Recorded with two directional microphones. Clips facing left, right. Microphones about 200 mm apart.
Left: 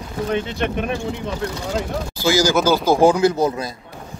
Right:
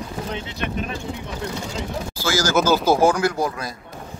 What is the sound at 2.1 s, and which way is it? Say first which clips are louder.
A man's voice: left 3 dB; 15° left (ahead or behind).